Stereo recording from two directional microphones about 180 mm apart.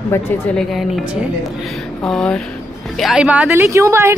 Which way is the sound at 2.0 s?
5° left (ahead or behind).